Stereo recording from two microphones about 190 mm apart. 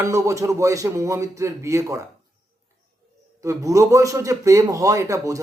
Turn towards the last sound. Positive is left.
turn(degrees=-15)  # may be behind; listen again after turning